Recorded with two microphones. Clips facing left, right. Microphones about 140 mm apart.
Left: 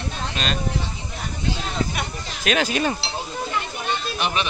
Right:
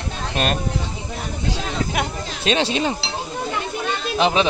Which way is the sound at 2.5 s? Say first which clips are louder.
Right 1 dB; 30° right (ahead or behind).